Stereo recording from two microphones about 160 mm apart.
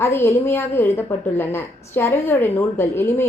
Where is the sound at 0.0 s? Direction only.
15° left (ahead or behind).